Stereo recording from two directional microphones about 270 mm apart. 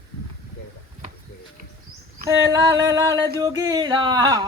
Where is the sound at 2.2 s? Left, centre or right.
Centre.